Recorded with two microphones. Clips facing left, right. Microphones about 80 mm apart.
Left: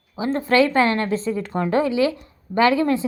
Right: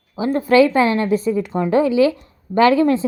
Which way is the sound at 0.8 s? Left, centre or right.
Left.